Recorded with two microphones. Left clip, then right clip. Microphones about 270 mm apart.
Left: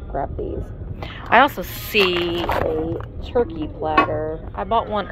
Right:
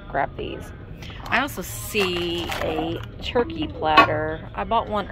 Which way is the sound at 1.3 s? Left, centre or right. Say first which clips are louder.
Left 9 dB; centre.